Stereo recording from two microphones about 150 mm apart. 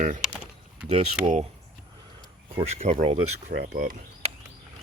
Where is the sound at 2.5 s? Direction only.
45° right (ahead or behind).